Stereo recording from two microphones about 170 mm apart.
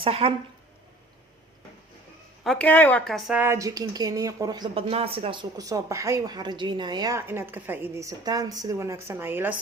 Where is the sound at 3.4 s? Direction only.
15° right (ahead or behind).